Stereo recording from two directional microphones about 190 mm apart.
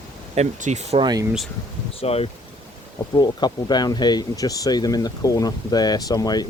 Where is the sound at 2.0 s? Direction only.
30° left (ahead or behind).